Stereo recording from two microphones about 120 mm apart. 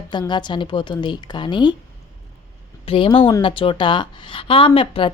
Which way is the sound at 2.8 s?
45° left (ahead or behind).